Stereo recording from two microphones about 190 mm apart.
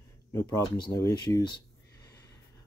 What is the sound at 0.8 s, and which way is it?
Speech, 20° left (ahead or behind).